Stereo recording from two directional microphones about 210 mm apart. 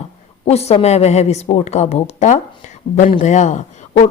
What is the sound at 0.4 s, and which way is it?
Speech, 30° left (ahead or behind).